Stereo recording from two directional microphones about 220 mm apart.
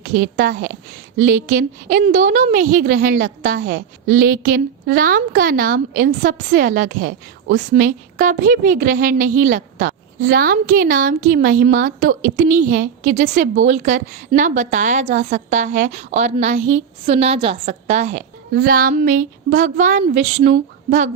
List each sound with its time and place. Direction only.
0.0 s a woman's voice: 40° right (ahead or behind)